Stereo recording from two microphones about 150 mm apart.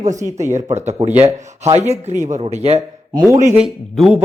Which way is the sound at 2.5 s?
45° right (ahead or behind).